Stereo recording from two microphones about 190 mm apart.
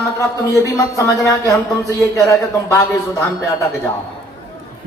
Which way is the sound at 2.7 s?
15° left (ahead or behind).